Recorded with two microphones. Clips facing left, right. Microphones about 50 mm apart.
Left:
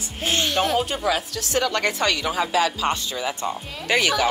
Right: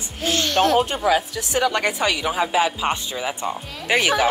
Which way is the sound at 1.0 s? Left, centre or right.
Centre.